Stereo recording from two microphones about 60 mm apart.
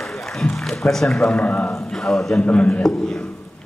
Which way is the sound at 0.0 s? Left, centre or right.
Centre.